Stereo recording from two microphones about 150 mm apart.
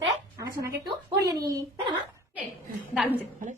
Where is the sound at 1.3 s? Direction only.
30° right (ahead or behind).